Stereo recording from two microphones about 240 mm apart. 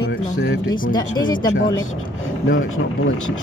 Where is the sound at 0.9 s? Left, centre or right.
Centre.